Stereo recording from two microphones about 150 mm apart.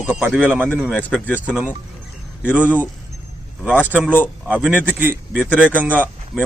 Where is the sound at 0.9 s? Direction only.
10° left (ahead or behind).